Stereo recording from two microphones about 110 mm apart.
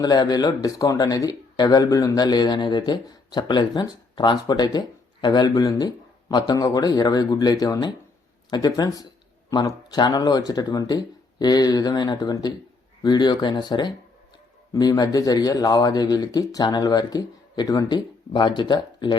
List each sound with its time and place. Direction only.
0.0 s speech: 40° left (ahead or behind)